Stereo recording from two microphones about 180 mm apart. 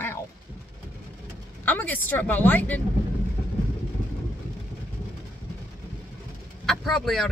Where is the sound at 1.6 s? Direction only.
10° left (ahead or behind).